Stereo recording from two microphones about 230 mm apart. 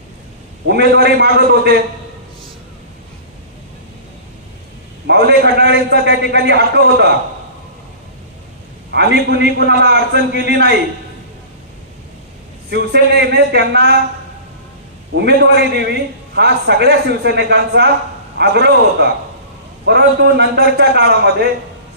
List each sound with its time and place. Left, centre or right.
0.7 s a man's voice: right
5.0 s a man's voice: right
8.9 s a man's voice: right
12.7 s a man's voice: right
15.1 s a man's voice: right